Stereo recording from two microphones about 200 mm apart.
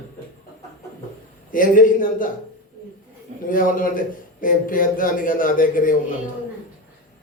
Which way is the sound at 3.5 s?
45° left (ahead or behind).